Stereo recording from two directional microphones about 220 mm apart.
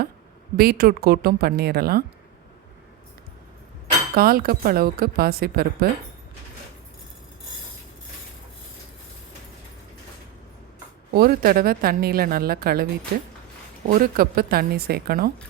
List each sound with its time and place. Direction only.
0.5 s speech: 45° right (ahead or behind)
4.1 s speech: 45° right (ahead or behind)
11.1 s speech: 40° right (ahead or behind)